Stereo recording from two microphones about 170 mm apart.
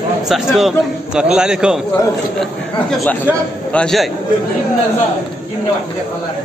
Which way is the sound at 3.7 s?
5° left (ahead or behind).